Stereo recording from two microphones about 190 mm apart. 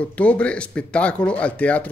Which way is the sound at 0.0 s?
5° left (ahead or behind).